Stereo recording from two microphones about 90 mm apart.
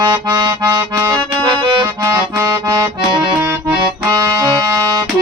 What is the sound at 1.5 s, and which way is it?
Accordion, 65° right (ahead or behind).